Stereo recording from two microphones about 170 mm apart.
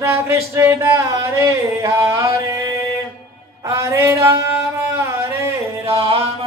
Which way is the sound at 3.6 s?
15° right (ahead or behind).